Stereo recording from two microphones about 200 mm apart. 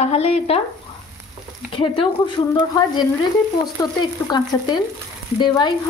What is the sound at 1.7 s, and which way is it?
Speech, 25° left (ahead or behind).